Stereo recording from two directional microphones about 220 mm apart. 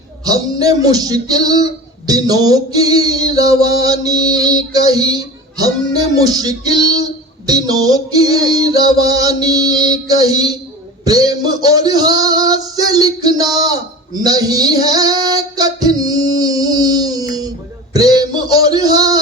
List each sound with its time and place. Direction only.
0.3 s speech: 15° right (ahead or behind)
14.3 s female singing: 15° right (ahead or behind)
17.9 s speech: 15° right (ahead or behind)